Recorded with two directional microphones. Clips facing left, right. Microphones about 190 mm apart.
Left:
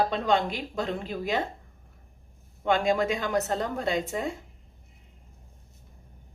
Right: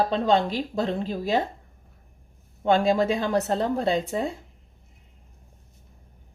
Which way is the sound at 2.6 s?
35° right (ahead or behind).